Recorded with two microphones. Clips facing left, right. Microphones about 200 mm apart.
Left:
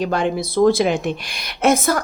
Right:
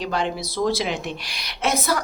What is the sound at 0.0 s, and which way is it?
A woman's voice, 50° left (ahead or behind).